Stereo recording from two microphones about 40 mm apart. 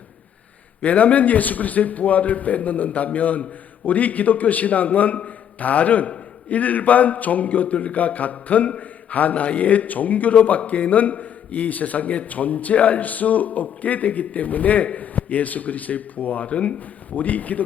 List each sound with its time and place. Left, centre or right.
0.8 s a man's voice: left